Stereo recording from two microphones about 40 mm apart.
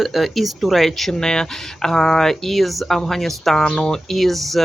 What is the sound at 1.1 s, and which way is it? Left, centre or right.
Speech, centre.